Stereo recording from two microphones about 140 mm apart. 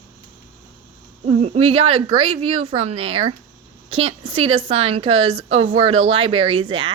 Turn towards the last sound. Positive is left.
turn(degrees=-35)  # may be behind; listen again after turning